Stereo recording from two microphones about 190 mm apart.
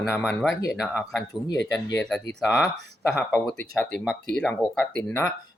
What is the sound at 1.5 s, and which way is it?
Speech, 65° left (ahead or behind).